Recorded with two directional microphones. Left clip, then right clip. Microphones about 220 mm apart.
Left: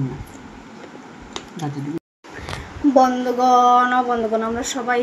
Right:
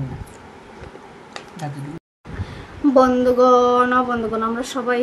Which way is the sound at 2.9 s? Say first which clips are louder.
Right 1 dB; 5° right (ahead or behind).